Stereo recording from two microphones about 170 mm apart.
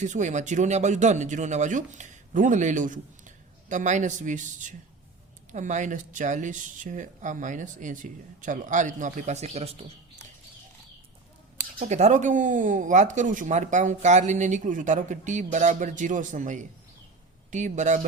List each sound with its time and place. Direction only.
0.0 s speech: 45° right (ahead or behind)
11.8 s speech: 45° right (ahead or behind)